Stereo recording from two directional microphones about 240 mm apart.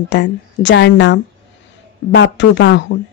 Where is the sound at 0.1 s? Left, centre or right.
Left.